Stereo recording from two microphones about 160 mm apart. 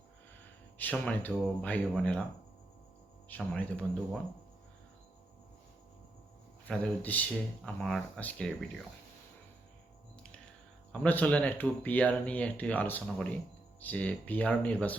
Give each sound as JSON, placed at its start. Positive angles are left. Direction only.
{"t": 0.8, "sound": "speech", "side_deg": 5}
{"t": 3.2, "sound": "speech", "side_deg": 10}
{"t": 6.7, "sound": "speech", "side_deg": 10}
{"t": 11.0, "sound": "speech", "side_deg": 10}